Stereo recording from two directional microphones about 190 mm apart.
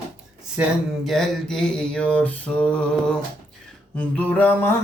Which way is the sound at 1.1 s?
Centre (ahead or behind).